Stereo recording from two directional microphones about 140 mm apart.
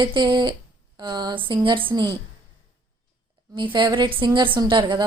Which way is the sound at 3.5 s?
35° right (ahead or behind).